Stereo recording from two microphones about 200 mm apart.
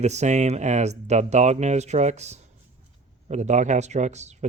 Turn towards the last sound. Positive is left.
turn(degrees=-35)  # may be behind; listen again after turning